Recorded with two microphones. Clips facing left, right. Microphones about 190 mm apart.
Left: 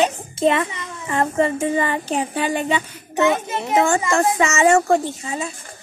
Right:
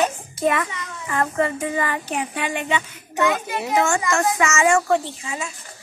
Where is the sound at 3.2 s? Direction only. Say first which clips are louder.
Left 3 dB; 25° left (ahead or behind).